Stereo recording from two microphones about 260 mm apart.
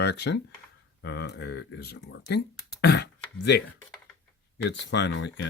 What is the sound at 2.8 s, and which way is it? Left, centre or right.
Throat clearing, left.